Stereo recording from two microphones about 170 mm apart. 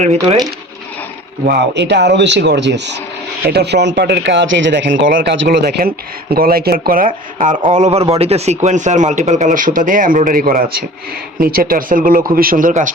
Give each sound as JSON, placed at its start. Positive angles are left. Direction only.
{"t": 0.0, "sound": "speech", "side_deg": -40}
{"t": 1.5, "sound": "speech", "side_deg": -85}
{"t": 3.4, "sound": "speech", "side_deg": -75}